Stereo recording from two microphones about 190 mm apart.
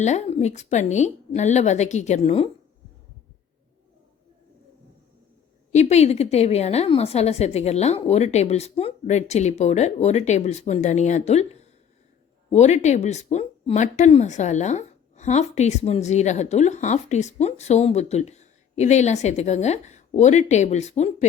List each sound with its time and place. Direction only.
0.0 s speech: 35° left (ahead or behind)
5.7 s speech: 35° left (ahead or behind)